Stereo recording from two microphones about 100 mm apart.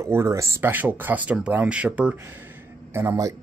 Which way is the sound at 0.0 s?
30° right (ahead or behind).